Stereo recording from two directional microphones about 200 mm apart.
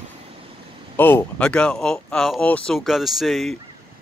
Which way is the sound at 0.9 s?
10° left (ahead or behind).